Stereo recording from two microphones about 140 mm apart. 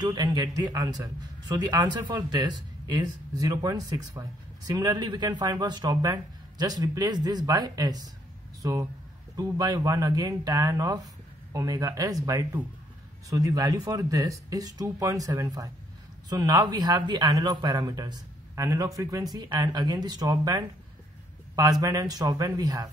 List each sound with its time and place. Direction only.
0.0 s a man's voice: 30° right (ahead or behind)
9.4 s a man's voice: 25° right (ahead or behind)